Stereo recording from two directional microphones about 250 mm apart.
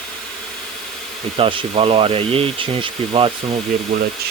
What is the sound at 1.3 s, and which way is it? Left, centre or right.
Speech, right.